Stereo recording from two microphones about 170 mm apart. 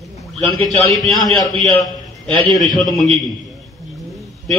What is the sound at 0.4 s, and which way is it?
Speech, 5° left (ahead or behind).